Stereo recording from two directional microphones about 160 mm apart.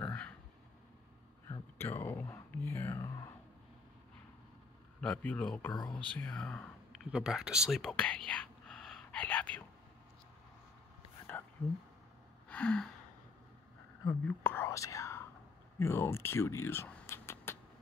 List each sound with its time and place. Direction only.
0.0 s a sound: 10° left (ahead or behind)
1.8 s speech: 10° left (ahead or behind)
5.0 s speech: 10° left (ahead or behind)
5.7 s speech: 25° left (ahead or behind)
5.9 s speech: 10° left (ahead or behind)
7.1 s speech: 5° right (ahead or behind)
12.4 s gasp: 5° left (ahead or behind)
14.2 s speech: 10° left (ahead or behind)